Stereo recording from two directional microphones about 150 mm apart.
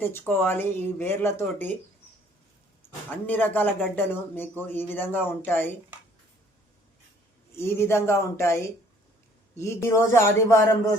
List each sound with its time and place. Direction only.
0.0 s speech: 15° left (ahead or behind)
3.2 s speech: 10° left (ahead or behind)
7.5 s speech: 15° left (ahead or behind)